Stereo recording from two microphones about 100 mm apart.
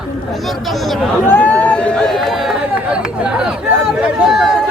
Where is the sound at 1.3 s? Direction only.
15° left (ahead or behind); by 3.4 s 10° right (ahead or behind).